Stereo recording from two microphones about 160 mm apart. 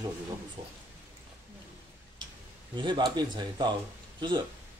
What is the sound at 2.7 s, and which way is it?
Speech, 30° right (ahead or behind).